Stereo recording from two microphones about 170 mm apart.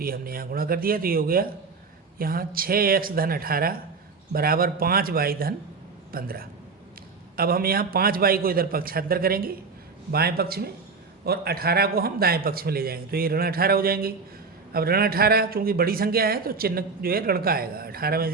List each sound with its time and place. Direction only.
0.0 s a man's voice: 60° right (ahead or behind)